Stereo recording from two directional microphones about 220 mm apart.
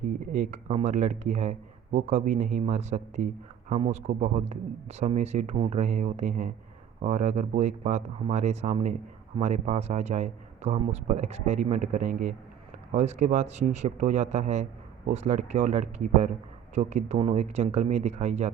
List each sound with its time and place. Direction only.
0.5 s speech: 30° right (ahead or behind)